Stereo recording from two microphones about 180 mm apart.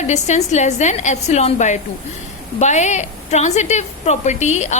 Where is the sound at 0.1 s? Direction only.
40° left (ahead or behind).